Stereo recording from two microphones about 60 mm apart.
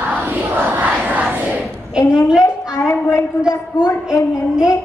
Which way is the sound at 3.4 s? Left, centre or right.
Centre.